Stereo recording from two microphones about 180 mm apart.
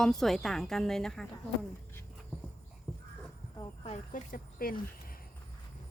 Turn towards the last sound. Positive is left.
turn(degrees=55)  # may be behind; listen again after turning